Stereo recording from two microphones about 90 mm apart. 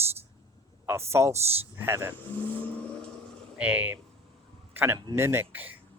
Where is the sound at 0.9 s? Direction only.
30° right (ahead or behind).